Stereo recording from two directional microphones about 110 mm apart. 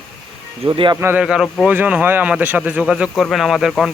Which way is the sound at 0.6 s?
50° right (ahead or behind).